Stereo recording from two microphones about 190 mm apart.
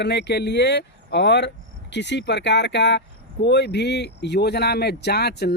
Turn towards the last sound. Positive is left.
turn(degrees=60)  # may be behind; listen again after turning